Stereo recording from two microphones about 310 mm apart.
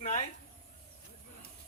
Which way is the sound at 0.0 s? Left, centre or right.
Left.